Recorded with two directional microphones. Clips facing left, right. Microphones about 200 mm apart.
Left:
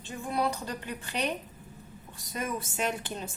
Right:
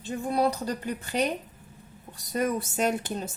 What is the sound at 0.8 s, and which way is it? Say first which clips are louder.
Speech: right 4 dB; 40° right (ahead or behind).